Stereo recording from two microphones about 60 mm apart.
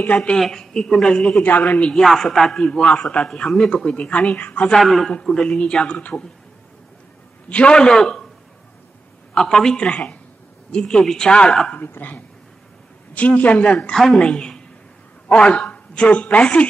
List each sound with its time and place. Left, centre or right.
0.0 s a man's voice: left
0.4 s speech: centre
1.4 s a man's voice: left
2.0 s speech: centre; by 4.7 s left
4.7 s a man's voice: centre; by 6.2 s left
7.4 s speech: centre
9.3 s speech: centre
11.7 s a man's voice: left
13.7 s a woman's voice: centre